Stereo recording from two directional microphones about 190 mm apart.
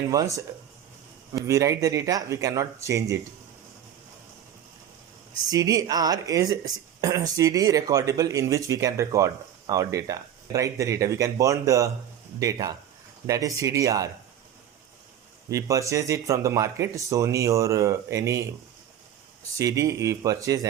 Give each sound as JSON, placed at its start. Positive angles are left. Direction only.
{"t": 0.1, "sound": "speech", "side_deg": -15}
{"t": 1.5, "sound": "speech", "side_deg": -15}
{"t": 5.5, "sound": "speech", "side_deg": -20}
{"t": 15.4, "sound": "speech", "side_deg": -15}
{"t": 19.5, "sound": "speech", "side_deg": -15}